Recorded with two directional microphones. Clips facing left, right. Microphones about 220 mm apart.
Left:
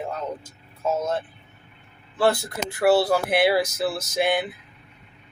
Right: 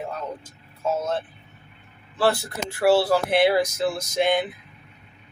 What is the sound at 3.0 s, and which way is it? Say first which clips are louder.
Speech: right 1 dB; 10° left (ahead or behind).